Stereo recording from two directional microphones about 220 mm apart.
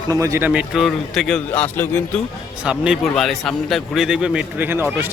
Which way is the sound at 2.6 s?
5° right (ahead or behind).